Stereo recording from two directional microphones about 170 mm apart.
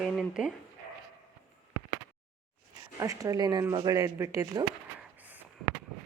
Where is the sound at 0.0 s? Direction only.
5° right (ahead or behind).